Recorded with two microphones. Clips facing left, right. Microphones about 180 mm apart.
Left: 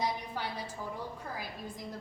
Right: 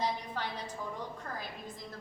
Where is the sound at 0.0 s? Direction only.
10° left (ahead or behind).